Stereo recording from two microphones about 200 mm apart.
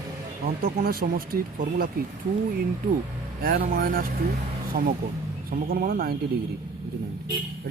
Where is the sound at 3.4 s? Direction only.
45° right (ahead or behind).